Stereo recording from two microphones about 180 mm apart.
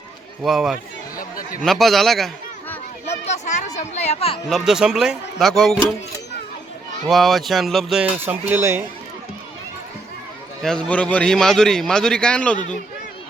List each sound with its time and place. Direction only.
0.4 s a man's voice: centre (ahead or behind)
1.1 s chatter: 50° left (ahead or behind)
1.6 s a man's voice: centre (ahead or behind)
3.1 s a sound: 40° left (ahead or behind)
3.8 s speech: 40° left (ahead or behind)
4.4 s a man's voice: centre (ahead or behind)
7.1 s a man's voice: centre (ahead or behind)
10.6 s a man's voice: 5° left (ahead or behind)